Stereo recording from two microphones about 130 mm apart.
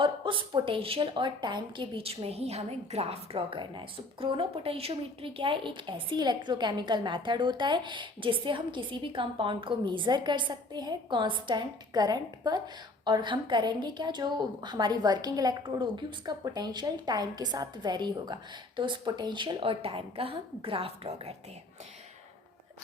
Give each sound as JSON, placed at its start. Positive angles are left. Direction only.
{"t": 0.0, "sound": "a woman's voice", "side_deg": -40}